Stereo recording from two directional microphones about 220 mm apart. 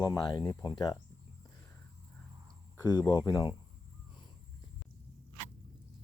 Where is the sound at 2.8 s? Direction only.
15° left (ahead or behind).